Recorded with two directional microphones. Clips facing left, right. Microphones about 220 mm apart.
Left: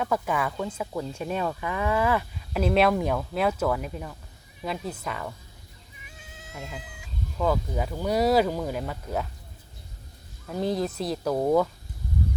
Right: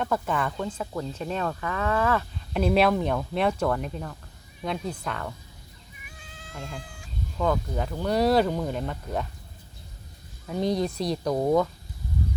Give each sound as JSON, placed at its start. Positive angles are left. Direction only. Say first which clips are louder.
{"t": 0.0, "sound": "speech", "louder": "even", "side_deg": 10}
{"t": 6.1, "sound": "cat", "louder": "even", "side_deg": 25}
{"t": 7.3, "sound": "speech", "louder": "even", "side_deg": 5}
{"t": 10.5, "sound": "speech", "louder": "right 1 dB", "side_deg": 5}